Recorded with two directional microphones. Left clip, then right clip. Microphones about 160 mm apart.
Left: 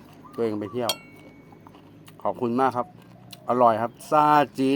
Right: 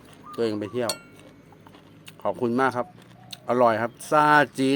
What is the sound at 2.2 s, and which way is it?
Speech, 15° right (ahead or behind).